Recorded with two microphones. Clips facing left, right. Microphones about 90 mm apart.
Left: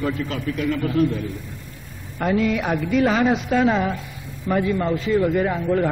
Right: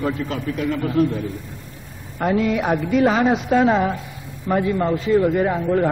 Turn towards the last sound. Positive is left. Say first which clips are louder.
# right 2 dB
turn(degrees=-20)  # may be behind; listen again after turning